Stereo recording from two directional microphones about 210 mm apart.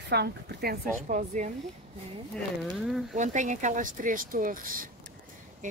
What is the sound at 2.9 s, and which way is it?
Speech, centre (ahead or behind).